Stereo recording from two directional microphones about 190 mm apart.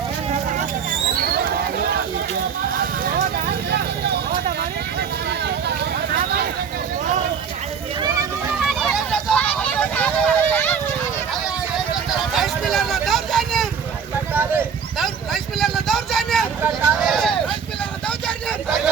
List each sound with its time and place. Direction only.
1.1 s a sound: 55° right (ahead or behind)
3.2 s vehicle: 55° right (ahead or behind)
6.1 s a sound: 55° right (ahead or behind)
8.6 s vehicle: centre (ahead or behind)
12.3 s vehicle: centre (ahead or behind)
14.9 s vehicle: centre (ahead or behind)